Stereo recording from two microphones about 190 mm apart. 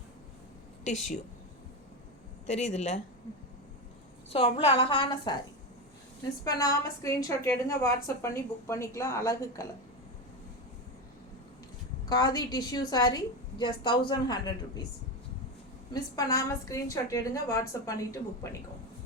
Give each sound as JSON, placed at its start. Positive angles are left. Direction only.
{"t": 0.9, "sound": "speech", "side_deg": 35}
{"t": 2.5, "sound": "speech", "side_deg": 35}
{"t": 4.3, "sound": "a woman's voice", "side_deg": 30}
{"t": 6.4, "sound": "a woman's voice", "side_deg": 20}
{"t": 12.0, "sound": "a woman's voice", "side_deg": 20}
{"t": 16.1, "sound": "a woman's voice", "side_deg": 15}